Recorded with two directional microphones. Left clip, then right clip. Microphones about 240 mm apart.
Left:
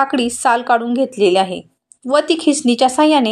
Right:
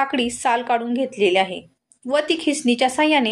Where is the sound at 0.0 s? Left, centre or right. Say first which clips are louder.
Left 5 dB; left.